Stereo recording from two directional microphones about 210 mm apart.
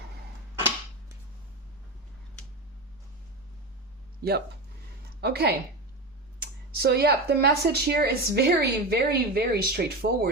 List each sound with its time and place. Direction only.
4.2 s speech: 50° right (ahead or behind)